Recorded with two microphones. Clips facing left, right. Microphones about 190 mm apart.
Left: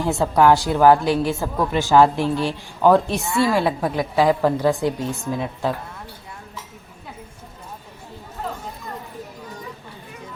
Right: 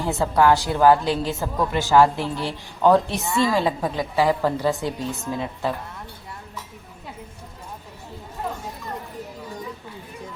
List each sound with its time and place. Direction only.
0.1 s a woman's voice: 15° left (ahead or behind)